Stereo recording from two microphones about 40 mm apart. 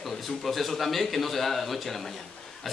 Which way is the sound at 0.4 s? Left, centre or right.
Centre.